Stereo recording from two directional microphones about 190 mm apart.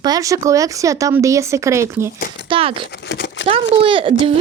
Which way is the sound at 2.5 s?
30° right (ahead or behind).